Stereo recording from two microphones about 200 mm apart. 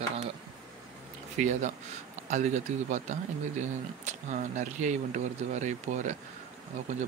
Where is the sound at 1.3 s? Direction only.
35° right (ahead or behind).